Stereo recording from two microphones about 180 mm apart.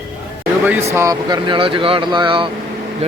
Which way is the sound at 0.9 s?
15° right (ahead or behind).